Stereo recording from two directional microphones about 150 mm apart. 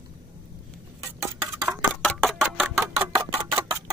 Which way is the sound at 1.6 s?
10° right (ahead or behind).